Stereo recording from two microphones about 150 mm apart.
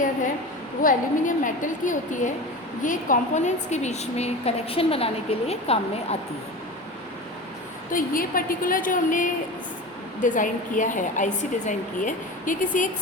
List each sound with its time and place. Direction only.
0.8 s a woman's voice: 65° left (ahead or behind); by 6.1 s 40° left (ahead or behind)
7.9 s a woman's voice: 65° left (ahead or behind)